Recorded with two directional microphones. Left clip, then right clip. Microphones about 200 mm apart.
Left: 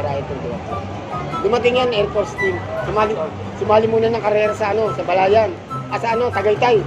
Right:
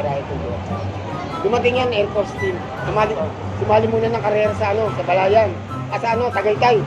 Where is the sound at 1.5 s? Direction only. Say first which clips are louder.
Left 1 dB; 20° left (ahead or behind).